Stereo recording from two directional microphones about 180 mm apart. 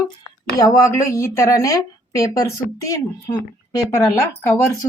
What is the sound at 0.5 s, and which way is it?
A woman's voice, 20° left (ahead or behind).